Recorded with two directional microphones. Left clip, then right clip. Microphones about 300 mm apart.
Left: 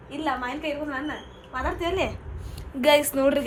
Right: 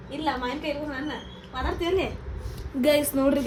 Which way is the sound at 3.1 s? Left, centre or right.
Centre.